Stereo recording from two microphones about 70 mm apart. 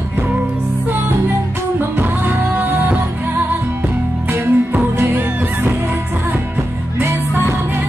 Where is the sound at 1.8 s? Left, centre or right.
Right.